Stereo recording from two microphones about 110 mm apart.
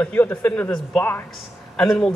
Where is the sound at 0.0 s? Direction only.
20° left (ahead or behind).